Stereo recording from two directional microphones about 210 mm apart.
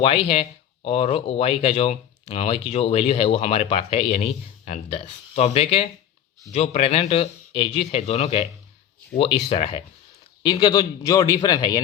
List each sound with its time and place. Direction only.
0.0 s speech: 25° left (ahead or behind)